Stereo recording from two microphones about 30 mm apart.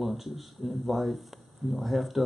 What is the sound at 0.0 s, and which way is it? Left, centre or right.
Speech, centre.